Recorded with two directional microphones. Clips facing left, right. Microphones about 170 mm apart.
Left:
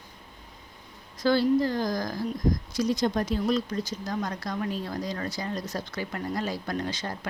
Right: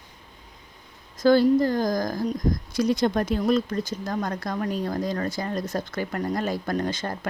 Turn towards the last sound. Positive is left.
turn(degrees=-50)  # may be behind; listen again after turning